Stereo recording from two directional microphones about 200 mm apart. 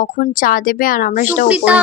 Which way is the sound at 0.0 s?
45° left (ahead or behind).